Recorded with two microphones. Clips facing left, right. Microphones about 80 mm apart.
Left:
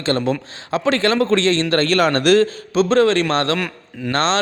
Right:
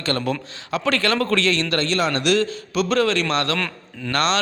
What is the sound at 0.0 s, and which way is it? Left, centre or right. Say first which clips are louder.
A man's voice: left 4 dB; left.